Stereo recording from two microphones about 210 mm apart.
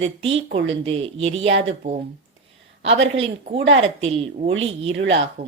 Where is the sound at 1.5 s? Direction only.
60° right (ahead or behind).